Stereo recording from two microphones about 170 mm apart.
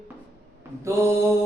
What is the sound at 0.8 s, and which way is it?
Speech, 15° right (ahead or behind).